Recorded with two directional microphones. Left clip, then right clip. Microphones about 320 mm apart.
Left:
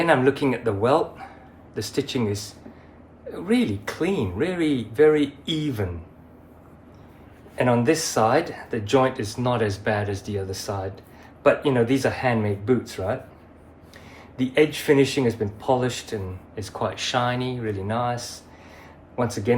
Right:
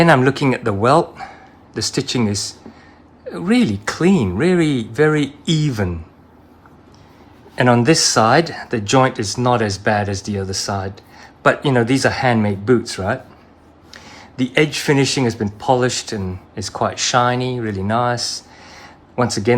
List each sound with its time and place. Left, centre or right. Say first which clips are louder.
0.0 s speech: right 6 dB; right
7.5 s speech: right 6 dB; right